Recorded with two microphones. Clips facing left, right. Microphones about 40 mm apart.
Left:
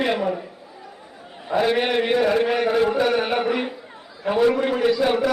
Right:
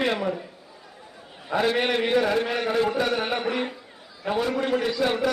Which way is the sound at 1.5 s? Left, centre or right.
Centre.